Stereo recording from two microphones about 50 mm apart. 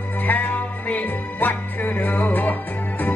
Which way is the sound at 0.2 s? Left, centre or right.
Left.